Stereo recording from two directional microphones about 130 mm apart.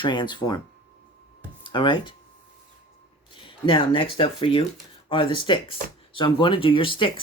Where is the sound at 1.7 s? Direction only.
40° left (ahead or behind).